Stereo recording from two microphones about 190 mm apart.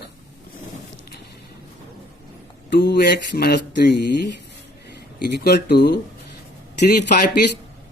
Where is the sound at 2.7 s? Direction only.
60° left (ahead or behind).